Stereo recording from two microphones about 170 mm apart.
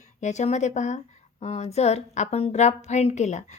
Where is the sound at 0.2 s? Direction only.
45° left (ahead or behind).